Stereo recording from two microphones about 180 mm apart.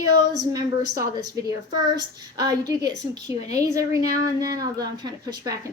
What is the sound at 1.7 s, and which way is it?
Speech, 20° right (ahead or behind).